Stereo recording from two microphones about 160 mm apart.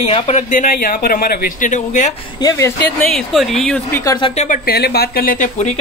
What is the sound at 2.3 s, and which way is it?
Speech, 20° left (ahead or behind).